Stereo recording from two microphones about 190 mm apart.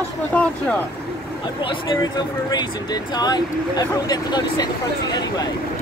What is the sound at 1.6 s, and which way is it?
Speech, 25° left (ahead or behind).